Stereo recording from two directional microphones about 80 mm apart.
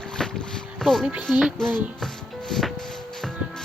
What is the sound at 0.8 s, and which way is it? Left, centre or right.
Speech, centre.